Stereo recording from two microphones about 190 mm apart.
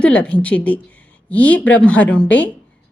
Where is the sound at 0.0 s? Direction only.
5° left (ahead or behind).